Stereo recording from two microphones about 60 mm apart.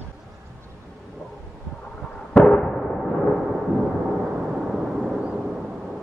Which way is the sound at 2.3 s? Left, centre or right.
Centre.